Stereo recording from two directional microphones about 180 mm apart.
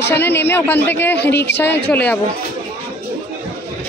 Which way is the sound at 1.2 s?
70° left (ahead or behind).